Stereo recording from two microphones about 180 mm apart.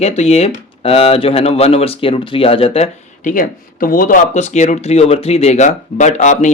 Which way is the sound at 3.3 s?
50° left (ahead or behind).